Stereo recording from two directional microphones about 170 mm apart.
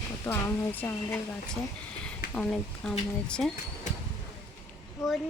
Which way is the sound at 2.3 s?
5° left (ahead or behind).